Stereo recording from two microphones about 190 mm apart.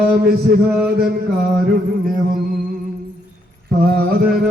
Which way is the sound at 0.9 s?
55° right (ahead or behind).